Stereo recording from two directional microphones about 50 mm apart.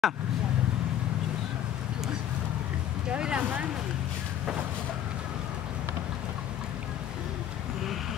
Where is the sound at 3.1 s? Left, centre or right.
Right.